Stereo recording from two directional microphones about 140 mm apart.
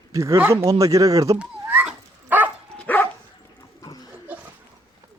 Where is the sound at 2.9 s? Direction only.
10° left (ahead or behind).